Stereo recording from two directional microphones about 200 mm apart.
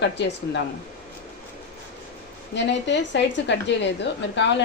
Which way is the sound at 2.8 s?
60° left (ahead or behind).